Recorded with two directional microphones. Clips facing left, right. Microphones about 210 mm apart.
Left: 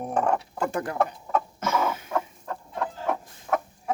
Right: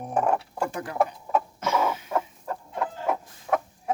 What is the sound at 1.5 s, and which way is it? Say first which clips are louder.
Chicken: right 1 dB; 50° left (ahead or behind).